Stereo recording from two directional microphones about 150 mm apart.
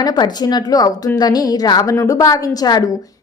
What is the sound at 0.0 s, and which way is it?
A woman's voice, 25° left (ahead or behind).